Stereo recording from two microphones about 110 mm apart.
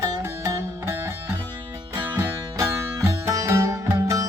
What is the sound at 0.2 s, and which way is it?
Music, 25° right (ahead or behind).